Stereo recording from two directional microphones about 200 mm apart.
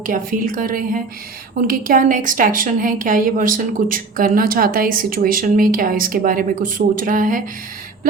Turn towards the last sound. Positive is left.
turn(degrees=-40)  # may be behind; listen again after turning